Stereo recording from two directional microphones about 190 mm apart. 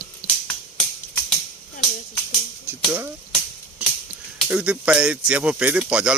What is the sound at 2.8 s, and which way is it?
Speech, 10° right (ahead or behind).